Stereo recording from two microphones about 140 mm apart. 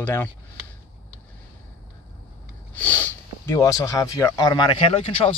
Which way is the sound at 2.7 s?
15° left (ahead or behind).